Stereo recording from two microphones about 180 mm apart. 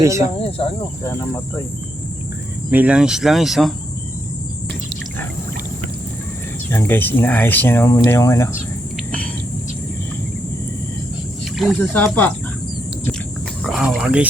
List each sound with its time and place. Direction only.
0.0 s speech: 15° right (ahead or behind)
0.6 s speech: 35° left (ahead or behind)
1.0 s speech: 15° left (ahead or behind)
2.6 s speech: 10° right (ahead or behind)
6.7 s speech: 10° left (ahead or behind)
11.5 s speech: centre (ahead or behind)
11.8 s speech: 10° left (ahead or behind)
13.7 s speech: centre (ahead or behind)